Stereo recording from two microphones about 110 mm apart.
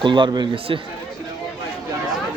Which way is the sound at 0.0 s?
45° right (ahead or behind).